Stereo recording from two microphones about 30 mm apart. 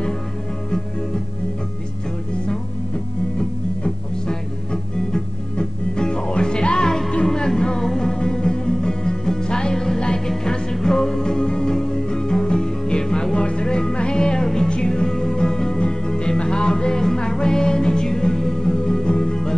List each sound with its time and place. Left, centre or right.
0.7 s music: centre
3.3 s music: left
19.0 s music: left